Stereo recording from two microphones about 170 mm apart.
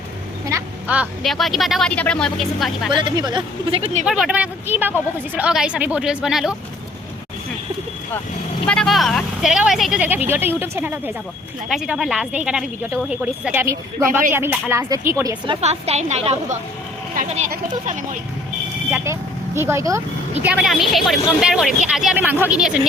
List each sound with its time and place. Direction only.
0.4 s a woman's voice: 15° right (ahead or behind)
2.9 s speech: 25° right (ahead or behind)
4.0 s a woman's voice: 5° right (ahead or behind)
8.6 s a woman's voice: 5° left (ahead or behind); by 15.5 s 20° right (ahead or behind)
15.6 s a woman's voice: 40° right (ahead or behind)
17.2 s speech: 50° right (ahead or behind)
18.9 s speech: 10° right (ahead or behind)
20.4 s a woman's voice: 5° right (ahead or behind)